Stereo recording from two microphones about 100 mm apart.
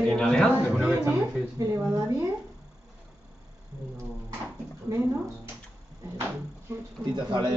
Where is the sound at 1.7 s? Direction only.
35° right (ahead or behind).